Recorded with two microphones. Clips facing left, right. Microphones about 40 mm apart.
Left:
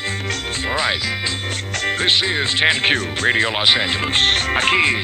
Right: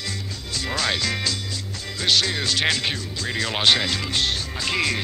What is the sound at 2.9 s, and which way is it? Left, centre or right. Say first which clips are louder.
Music: left 11 dB; left.